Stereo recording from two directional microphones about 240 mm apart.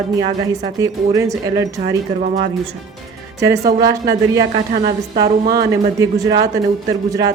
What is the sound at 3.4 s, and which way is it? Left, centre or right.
Speech, centre.